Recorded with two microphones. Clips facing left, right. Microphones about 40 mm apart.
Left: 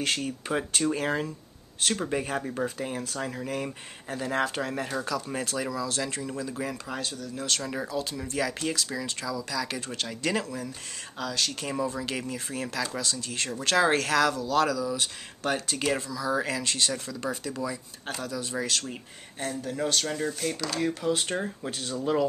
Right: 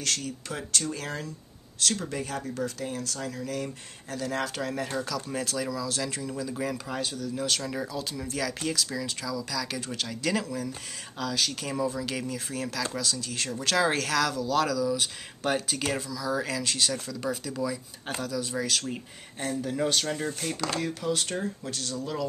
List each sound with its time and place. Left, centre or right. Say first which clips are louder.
0.0 s speech: left 3 dB; left
4.4 s speech: left 4 dB; centre
16.1 s speech: left 2 dB; centre
20.8 s speech: left 2 dB; centre; by 22.2 s left